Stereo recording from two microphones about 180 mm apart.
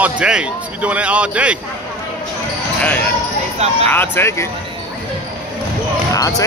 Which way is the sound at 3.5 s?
35° right (ahead or behind).